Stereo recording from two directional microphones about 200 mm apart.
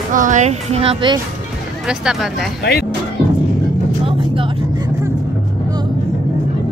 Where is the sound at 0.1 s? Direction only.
40° right (ahead or behind).